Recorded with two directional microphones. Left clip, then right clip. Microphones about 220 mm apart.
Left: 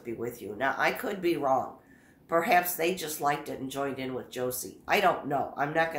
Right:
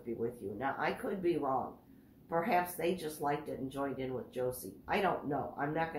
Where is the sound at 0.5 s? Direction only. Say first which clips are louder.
Left 9 dB; 50° left (ahead or behind).